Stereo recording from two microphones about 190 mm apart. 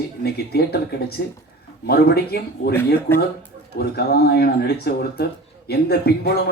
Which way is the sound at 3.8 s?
55° left (ahead or behind).